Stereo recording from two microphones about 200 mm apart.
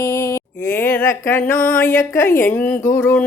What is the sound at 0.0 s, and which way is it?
Speech, 15° left (ahead or behind).